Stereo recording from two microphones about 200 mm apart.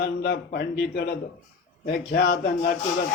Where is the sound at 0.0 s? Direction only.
55° left (ahead or behind).